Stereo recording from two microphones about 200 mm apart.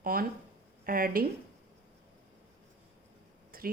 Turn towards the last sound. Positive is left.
turn(degrees=-45)  # may be behind; listen again after turning